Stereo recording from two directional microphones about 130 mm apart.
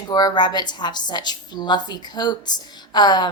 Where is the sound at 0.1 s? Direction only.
30° left (ahead or behind).